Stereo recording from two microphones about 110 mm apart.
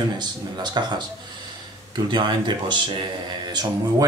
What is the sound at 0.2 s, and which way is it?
Speech, 40° right (ahead or behind).